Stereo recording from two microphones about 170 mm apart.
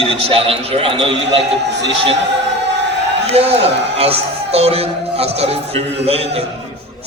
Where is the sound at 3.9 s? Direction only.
35° right (ahead or behind).